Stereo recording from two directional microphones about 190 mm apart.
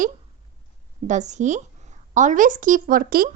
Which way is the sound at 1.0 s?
40° right (ahead or behind).